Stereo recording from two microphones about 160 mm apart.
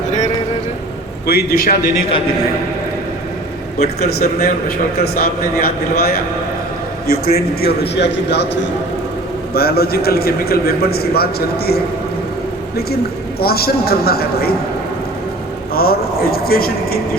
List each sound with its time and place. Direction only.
1.3 s a man's voice: 70° left (ahead or behind)
3.8 s a man's voice: 75° left (ahead or behind)
9.6 s a man's voice: 75° left (ahead or behind)
13.4 s a man's voice: 75° left (ahead or behind)
15.7 s a man's voice: 70° left (ahead or behind)